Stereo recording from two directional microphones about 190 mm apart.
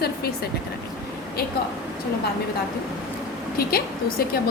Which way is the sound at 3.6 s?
55° left (ahead or behind).